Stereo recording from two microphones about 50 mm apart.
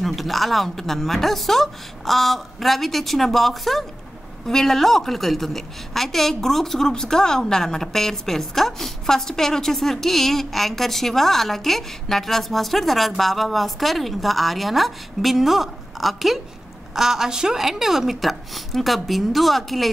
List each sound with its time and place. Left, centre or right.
0.0 s a woman's voice: centre